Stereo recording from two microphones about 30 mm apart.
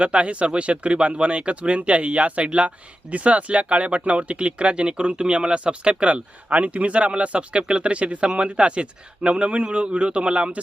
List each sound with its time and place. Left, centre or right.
0.0 s speech: right